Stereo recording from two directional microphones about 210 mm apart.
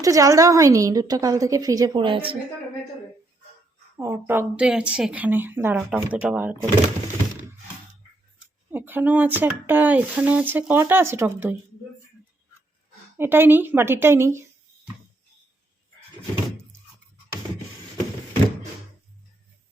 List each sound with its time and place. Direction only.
0.0 s speech: 15° right (ahead or behind)
3.9 s speech: 10° right (ahead or behind)
8.7 s speech: 10° right (ahead or behind)
13.1 s speech: 10° right (ahead or behind)